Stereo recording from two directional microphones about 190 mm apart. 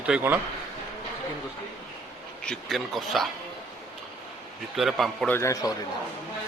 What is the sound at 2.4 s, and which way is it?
Speech, 5° left (ahead or behind).